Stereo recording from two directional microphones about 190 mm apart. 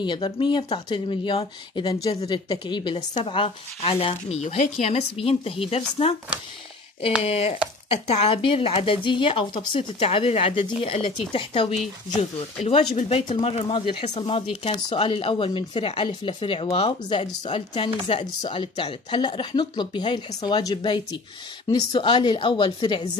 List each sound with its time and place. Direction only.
0.0 s speech: 25° left (ahead or behind)
7.2 s speech: 35° left (ahead or behind)